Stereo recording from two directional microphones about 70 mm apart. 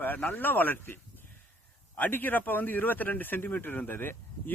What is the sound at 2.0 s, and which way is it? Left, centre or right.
Speech, left.